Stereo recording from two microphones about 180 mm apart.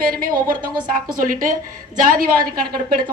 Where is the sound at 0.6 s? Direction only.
25° right (ahead or behind).